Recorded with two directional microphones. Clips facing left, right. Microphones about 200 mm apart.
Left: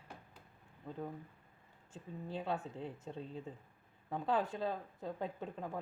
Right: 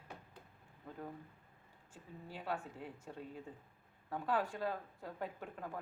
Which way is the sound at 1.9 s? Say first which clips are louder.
Left 7 dB; 20° left (ahead or behind).